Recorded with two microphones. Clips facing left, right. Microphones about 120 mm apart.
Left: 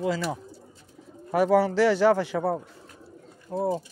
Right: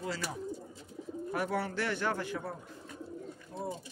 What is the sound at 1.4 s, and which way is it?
A man's voice, 90° left.